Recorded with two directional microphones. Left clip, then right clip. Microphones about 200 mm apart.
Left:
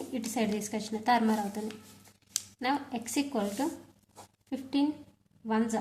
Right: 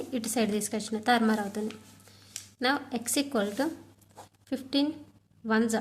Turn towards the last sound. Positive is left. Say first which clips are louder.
# right 4 dB
turn(degrees=-30)  # may be behind; listen again after turning